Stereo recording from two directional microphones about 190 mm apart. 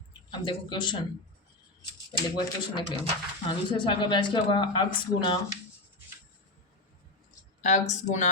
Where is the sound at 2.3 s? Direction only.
20° left (ahead or behind).